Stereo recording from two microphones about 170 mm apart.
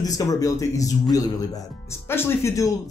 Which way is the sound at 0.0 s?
20° left (ahead or behind).